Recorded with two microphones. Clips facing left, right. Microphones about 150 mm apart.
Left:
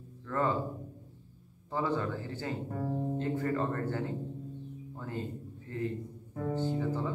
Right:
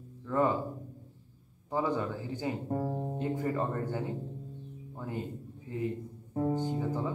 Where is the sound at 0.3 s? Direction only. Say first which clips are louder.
Right 3 dB; 15° right (ahead or behind).